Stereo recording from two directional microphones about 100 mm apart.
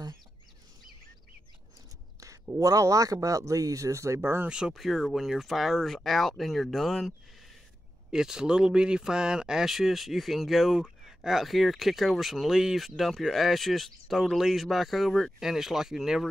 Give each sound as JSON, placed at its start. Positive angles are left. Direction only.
{"t": 2.6, "sound": "speech", "side_deg": -35}
{"t": 4.5, "sound": "speech", "side_deg": -5}
{"t": 8.1, "sound": "speech", "side_deg": -5}